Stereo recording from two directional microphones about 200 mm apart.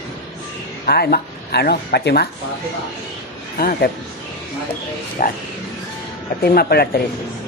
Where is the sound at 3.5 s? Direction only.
45° left (ahead or behind).